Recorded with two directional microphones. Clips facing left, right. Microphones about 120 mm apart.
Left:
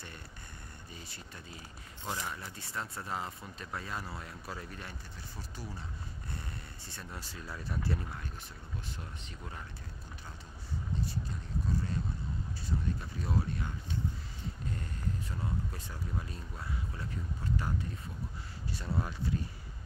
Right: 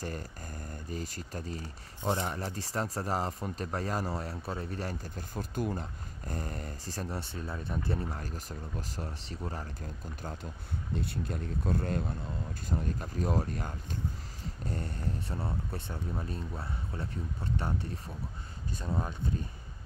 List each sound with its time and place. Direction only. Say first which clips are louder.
0.0 s speech: right 10 dB; 40° right (ahead or behind)
7.4 s speech: even; 25° right (ahead or behind)
8.1 s speech: right 5 dB; 40° right (ahead or behind)
11.0 s speech: right 3 dB; 60° right (ahead or behind)
12.6 s speech: right 2 dB; 45° right (ahead or behind)
14.7 s speech: right 4 dB; 30° right (ahead or behind)